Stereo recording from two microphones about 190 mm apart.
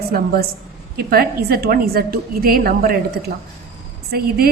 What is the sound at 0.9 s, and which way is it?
A woman's voice, 55° right (ahead or behind).